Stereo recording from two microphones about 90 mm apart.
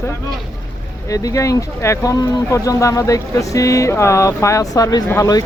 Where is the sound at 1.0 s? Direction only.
40° left (ahead or behind).